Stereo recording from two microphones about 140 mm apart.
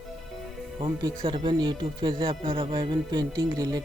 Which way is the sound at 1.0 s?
30° right (ahead or behind).